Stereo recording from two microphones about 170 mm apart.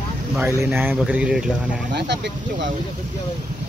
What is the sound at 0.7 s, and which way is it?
Speech, 10° right (ahead or behind).